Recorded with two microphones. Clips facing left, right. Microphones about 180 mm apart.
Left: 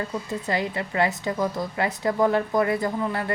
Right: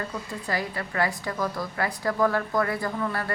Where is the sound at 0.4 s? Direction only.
20° left (ahead or behind).